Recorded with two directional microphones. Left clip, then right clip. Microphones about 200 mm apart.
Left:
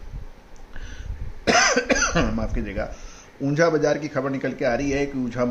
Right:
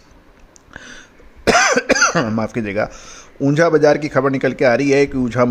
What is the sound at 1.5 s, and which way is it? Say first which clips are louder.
Speech: right 5 dB; 45° right (ahead or behind).